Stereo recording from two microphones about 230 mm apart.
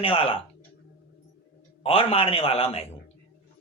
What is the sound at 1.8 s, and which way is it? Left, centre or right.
Speech, left.